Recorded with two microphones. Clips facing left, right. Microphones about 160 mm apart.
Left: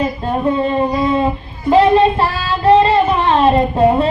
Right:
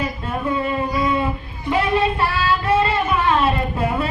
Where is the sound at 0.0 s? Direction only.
35° left (ahead or behind).